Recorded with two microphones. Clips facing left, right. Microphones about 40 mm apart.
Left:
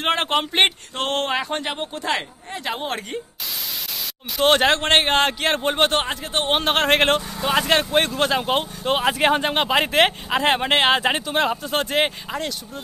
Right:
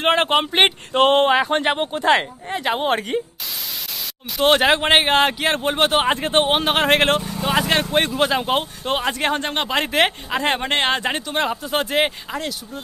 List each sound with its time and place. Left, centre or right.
0.0 s speech: centre
0.9 s speech: right
4.4 s speech: centre
6.0 s speech: right
6.4 s speech: centre